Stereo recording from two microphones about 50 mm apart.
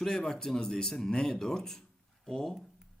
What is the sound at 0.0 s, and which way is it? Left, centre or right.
Speech, centre.